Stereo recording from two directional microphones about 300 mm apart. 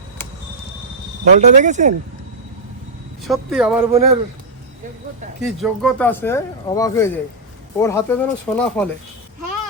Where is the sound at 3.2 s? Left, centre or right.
Centre.